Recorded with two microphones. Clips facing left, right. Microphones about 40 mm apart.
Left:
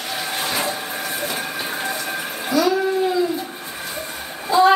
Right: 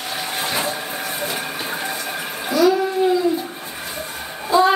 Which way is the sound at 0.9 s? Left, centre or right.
Centre.